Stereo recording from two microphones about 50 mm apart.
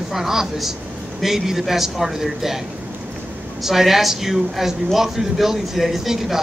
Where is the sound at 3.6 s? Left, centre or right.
Centre.